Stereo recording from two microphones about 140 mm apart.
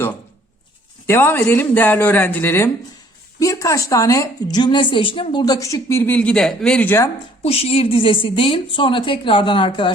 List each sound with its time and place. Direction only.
1.0 s a woman's voice: 15° left (ahead or behind)
7.4 s a woman's voice: 45° left (ahead or behind)